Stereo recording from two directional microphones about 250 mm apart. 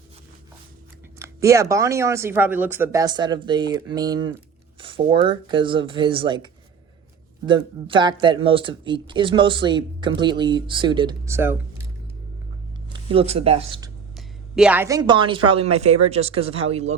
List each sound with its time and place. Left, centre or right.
1.2 s speech: centre
12.9 s speech: right
14.2 s speech: centre; by 16.8 s right